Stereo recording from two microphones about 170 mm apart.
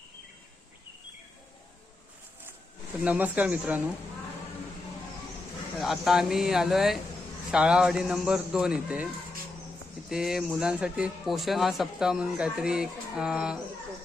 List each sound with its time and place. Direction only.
3.0 s speech: 10° right (ahead or behind)
5.7 s a man's voice: centre (ahead or behind)
10.1 s a man's voice: 5° right (ahead or behind)